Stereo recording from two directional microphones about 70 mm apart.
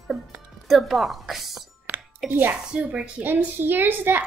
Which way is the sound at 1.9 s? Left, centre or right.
Right.